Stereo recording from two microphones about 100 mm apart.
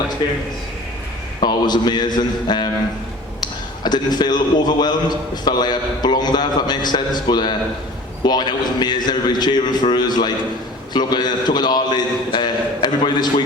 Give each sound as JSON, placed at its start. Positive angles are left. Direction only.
{"t": 0.2, "sound": "a man's voice", "side_deg": 50}
{"t": 1.4, "sound": "a man's voice", "side_deg": 45}